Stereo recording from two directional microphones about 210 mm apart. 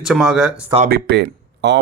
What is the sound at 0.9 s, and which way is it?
Speech, 50° right (ahead or behind).